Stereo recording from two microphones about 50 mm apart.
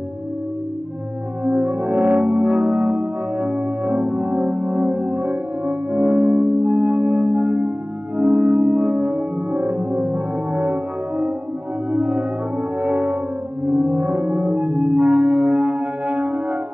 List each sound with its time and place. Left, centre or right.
1.4 s music: right